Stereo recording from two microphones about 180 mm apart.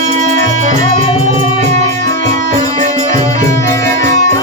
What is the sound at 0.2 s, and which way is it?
Music, 45° right (ahead or behind).